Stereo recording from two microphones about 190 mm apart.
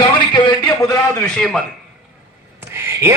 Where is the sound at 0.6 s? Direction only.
15° left (ahead or behind).